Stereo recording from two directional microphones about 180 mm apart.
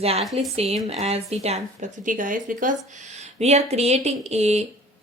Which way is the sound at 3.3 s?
35° right (ahead or behind).